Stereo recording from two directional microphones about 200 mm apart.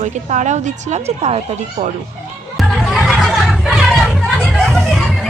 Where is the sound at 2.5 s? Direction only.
Centre (ahead or behind).